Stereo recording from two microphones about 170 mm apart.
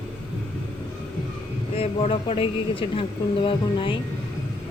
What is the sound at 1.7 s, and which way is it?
A woman's voice, 35° left (ahead or behind).